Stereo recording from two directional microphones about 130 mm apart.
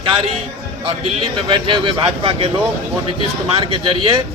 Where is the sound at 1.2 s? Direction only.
40° right (ahead or behind).